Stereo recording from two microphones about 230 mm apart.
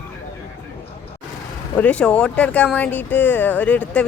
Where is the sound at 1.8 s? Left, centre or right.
Centre.